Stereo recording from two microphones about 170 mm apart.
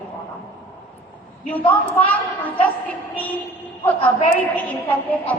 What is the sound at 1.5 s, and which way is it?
A woman's voice, 10° left (ahead or behind).